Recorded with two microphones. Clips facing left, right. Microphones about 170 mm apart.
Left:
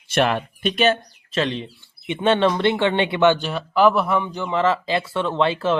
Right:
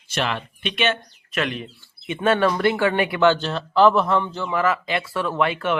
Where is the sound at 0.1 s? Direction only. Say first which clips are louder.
Left 6 dB; 50° left (ahead or behind).